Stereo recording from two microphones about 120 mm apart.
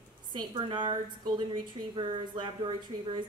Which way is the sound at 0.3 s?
40° right (ahead or behind).